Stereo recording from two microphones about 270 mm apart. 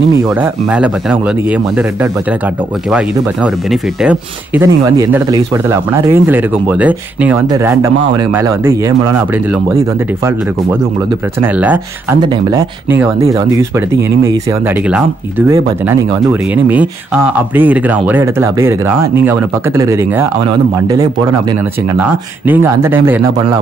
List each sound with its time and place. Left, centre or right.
0.4 s speech: centre
4.0 s a man's voice: centre
11.4 s a man's voice: centre
17.6 s a man's voice: centre
22.5 s a man's voice: centre